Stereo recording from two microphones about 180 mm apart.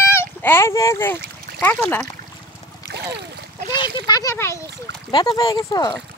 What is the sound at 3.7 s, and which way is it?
A child's voice, 25° left (ahead or behind).